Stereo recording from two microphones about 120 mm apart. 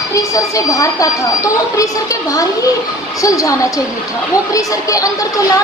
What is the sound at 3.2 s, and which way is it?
Speech, 30° left (ahead or behind).